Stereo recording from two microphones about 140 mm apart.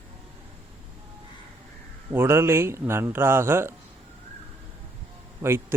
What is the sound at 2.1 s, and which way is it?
Speech, 15° right (ahead or behind).